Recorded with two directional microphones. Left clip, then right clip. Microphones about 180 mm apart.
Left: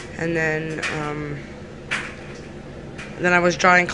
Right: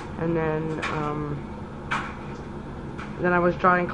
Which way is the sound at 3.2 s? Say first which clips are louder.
Left 4 dB; 30° left (ahead or behind).